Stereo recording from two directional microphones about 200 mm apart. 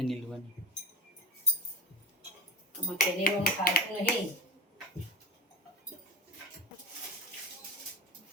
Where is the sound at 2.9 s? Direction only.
45° left (ahead or behind).